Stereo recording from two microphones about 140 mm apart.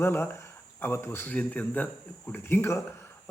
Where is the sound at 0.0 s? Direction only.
15° left (ahead or behind).